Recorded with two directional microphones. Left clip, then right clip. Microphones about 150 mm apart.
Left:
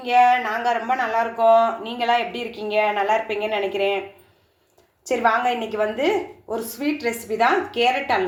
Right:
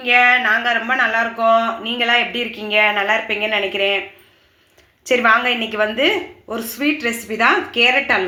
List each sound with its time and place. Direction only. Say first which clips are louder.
0.0 s speech: right 3 dB; 20° right (ahead or behind)
5.0 s a woman's voice: right 5 dB; 20° right (ahead or behind)